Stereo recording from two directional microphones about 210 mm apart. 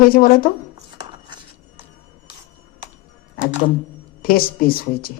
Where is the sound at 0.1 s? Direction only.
45° left (ahead or behind).